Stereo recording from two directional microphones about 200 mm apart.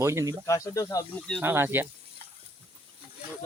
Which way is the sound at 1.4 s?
10° right (ahead or behind).